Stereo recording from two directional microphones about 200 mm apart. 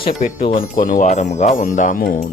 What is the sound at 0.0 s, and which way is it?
Speech, 45° left (ahead or behind).